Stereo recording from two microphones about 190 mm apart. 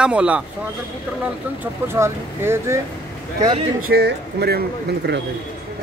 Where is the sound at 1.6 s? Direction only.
15° right (ahead or behind).